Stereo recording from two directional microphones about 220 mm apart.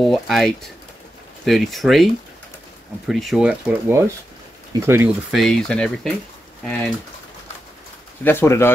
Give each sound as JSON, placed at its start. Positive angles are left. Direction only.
{"t": 0.0, "sound": "speech", "side_deg": 0}
{"t": 3.1, "sound": "speech", "side_deg": 0}
{"t": 8.2, "sound": "speech", "side_deg": 10}